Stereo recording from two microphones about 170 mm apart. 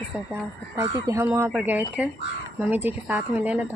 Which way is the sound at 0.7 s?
20° right (ahead or behind).